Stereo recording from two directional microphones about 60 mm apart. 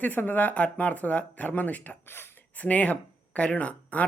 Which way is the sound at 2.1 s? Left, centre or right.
Left.